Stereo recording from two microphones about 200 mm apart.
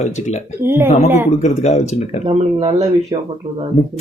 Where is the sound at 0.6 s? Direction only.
10° right (ahead or behind).